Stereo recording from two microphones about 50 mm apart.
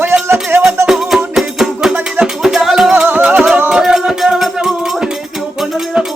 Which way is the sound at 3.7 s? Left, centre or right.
Centre.